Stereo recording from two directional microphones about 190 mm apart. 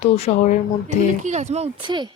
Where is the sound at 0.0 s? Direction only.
35° left (ahead or behind).